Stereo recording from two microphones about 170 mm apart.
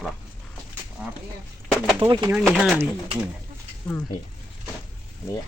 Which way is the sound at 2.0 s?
30° right (ahead or behind).